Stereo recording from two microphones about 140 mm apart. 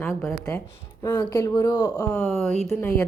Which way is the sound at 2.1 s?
5° left (ahead or behind).